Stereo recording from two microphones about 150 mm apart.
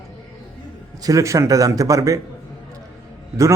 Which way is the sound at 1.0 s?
20° right (ahead or behind).